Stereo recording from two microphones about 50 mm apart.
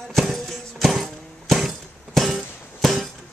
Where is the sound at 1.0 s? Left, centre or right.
Centre.